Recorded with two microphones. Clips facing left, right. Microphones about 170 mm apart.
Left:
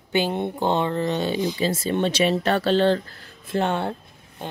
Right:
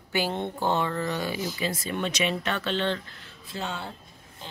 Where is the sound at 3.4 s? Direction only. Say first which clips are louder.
Left 11 dB; 55° left (ahead or behind).